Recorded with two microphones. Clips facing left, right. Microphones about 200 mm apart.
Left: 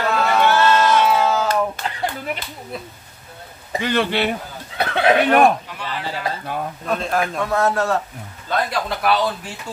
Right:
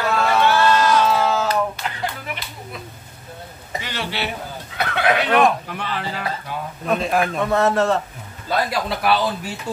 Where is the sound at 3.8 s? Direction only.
55° left (ahead or behind).